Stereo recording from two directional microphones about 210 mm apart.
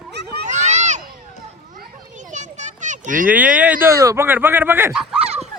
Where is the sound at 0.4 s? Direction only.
35° right (ahead or behind).